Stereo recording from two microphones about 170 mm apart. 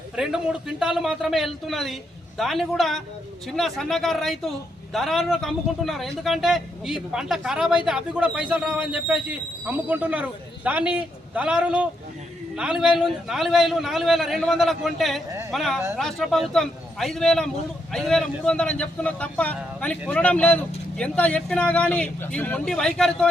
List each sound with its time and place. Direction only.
0.2 s a man's voice: 5° right (ahead or behind)
15.3 s a sound: 15° right (ahead or behind)
15.5 s a man's voice: centre (ahead or behind)